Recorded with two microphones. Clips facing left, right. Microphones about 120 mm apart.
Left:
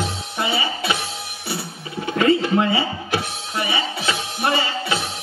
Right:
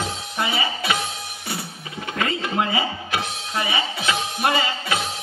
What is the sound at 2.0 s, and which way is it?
Music, 25° left (ahead or behind).